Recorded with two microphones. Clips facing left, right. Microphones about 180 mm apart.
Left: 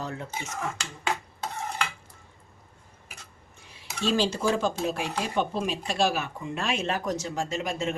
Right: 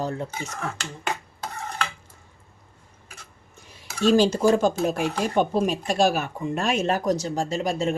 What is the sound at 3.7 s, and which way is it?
Speech, 45° right (ahead or behind).